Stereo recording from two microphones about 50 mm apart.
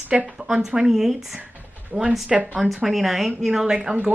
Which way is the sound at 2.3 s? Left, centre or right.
Centre.